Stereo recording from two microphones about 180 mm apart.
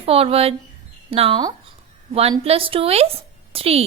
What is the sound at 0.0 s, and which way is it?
A woman's voice, 30° right (ahead or behind).